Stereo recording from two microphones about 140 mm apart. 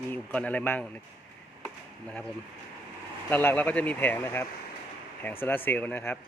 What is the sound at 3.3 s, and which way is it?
Speech, 15° left (ahead or behind).